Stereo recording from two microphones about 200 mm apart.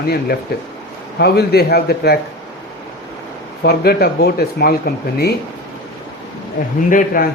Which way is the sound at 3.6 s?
50° left (ahead or behind).